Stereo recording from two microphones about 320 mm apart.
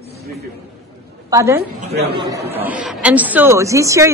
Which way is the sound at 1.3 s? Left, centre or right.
Centre.